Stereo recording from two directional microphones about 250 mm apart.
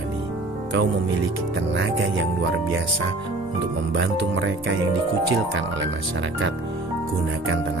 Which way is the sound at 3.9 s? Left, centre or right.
Right.